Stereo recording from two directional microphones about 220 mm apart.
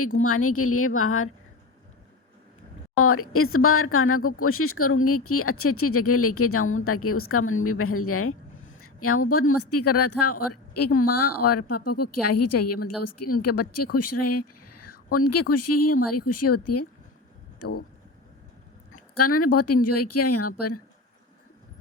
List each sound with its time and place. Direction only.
0.0 s a woman's voice: 80° left
3.0 s speech: 80° left
19.1 s speech: 90° left